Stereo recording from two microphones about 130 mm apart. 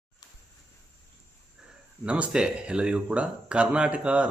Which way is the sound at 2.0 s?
10° right (ahead or behind).